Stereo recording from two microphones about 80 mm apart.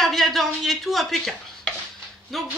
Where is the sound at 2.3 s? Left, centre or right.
Centre.